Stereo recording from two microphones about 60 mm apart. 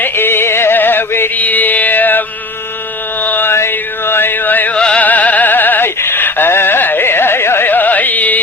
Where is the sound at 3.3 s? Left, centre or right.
Left.